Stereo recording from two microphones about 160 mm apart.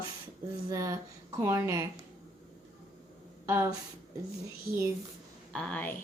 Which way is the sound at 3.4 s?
15° right (ahead or behind).